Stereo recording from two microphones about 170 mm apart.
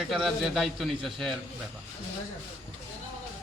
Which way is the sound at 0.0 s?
Centre (ahead or behind).